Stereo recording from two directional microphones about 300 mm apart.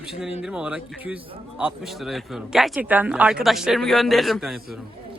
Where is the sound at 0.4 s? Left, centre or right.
Centre.